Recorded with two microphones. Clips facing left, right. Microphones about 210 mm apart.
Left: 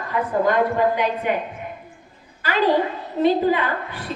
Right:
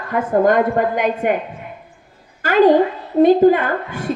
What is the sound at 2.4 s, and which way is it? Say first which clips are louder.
A woman's voice: right 7 dB; 50° right (ahead or behind).